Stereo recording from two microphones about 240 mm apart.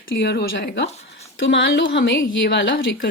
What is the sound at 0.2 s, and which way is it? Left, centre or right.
Speech, left.